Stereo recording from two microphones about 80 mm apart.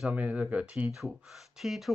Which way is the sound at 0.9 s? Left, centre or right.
Centre.